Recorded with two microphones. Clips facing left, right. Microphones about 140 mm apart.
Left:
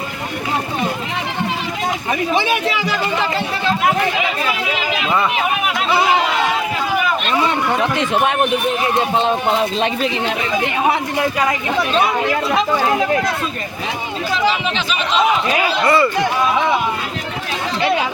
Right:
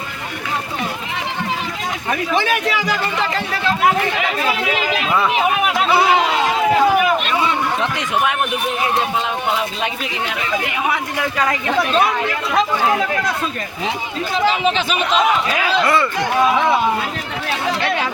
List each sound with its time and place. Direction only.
2.3 s a man's voice: 5° left (ahead or behind)
9.1 s a man's voice: 30° left (ahead or behind)
11.7 s a man's voice: centre (ahead or behind)
15.8 s a man's voice: centre (ahead or behind)